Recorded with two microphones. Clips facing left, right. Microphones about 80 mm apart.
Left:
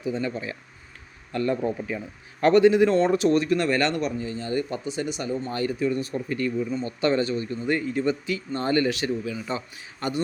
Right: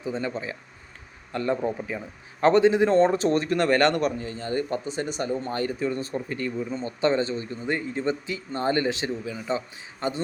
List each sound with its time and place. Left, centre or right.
0.0 s a man's voice: right